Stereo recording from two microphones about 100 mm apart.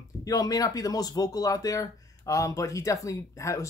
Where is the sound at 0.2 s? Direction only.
40° left (ahead or behind).